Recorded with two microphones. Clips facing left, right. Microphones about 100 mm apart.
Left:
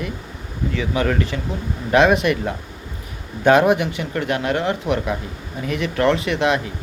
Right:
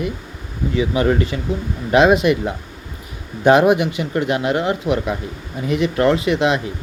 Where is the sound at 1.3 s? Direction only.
20° right (ahead or behind).